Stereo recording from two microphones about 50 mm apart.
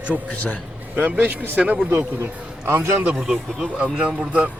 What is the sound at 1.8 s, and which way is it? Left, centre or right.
A man's voice, right.